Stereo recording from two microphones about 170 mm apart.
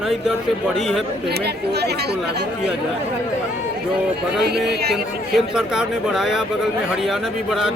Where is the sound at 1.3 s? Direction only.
70° right (ahead or behind).